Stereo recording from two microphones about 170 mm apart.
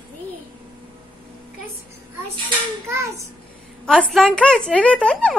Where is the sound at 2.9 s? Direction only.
15° right (ahead or behind).